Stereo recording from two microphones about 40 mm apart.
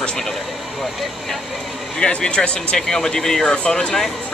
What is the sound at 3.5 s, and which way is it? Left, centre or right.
Speech, left.